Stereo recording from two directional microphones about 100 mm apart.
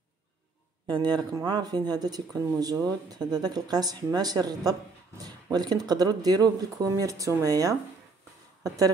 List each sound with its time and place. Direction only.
0.8 s speech: 50° right (ahead or behind)